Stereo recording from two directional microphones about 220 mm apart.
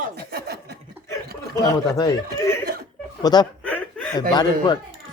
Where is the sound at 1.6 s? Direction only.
15° left (ahead or behind).